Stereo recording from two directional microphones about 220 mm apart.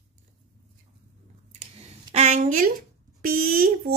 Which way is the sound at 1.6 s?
30° right (ahead or behind).